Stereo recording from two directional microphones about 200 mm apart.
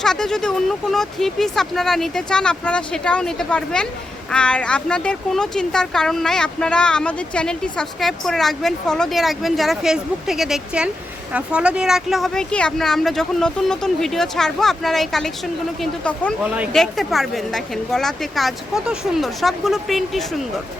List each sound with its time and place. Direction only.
0.0 s a woman's voice: 5° left (ahead or behind)